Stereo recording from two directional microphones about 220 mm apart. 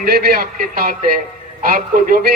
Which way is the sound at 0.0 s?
45° right (ahead or behind).